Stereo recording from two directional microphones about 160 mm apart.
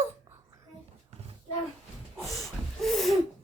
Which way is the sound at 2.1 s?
Centre (ahead or behind).